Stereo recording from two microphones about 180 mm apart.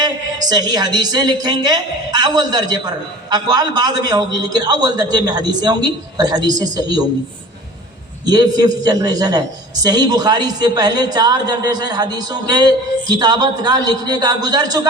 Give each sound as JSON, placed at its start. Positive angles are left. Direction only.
{"t": 0.0, "sound": "a man's voice", "side_deg": -20}
{"t": 8.3, "sound": "a man's voice", "side_deg": -20}